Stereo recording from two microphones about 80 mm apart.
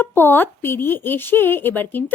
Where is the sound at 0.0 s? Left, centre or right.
Left.